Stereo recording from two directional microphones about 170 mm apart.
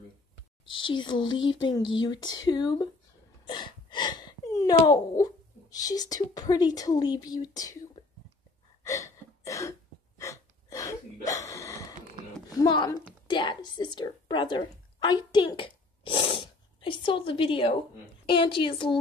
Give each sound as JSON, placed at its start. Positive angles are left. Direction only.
{"t": 0.8, "sound": "speech", "side_deg": 30}
{"t": 3.4, "sound": "a sound", "side_deg": 25}
{"t": 4.8, "sound": "speech", "side_deg": 20}
{"t": 8.0, "sound": "whispering", "side_deg": 35}
{"t": 8.8, "sound": "a sound", "side_deg": 15}
{"t": 12.4, "sound": "a woman's voice", "side_deg": 25}